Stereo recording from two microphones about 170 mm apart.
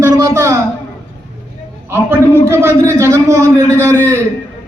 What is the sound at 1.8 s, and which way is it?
A man's voice, 15° right (ahead or behind).